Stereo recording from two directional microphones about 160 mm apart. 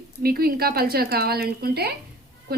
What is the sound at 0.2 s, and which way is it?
Speech, 70° right (ahead or behind).